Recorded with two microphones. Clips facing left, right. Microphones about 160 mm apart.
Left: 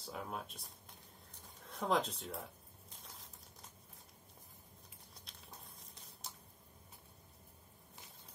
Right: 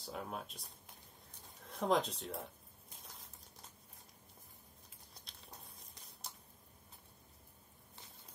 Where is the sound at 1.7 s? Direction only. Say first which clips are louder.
Right 2 dB; centre (ahead or behind).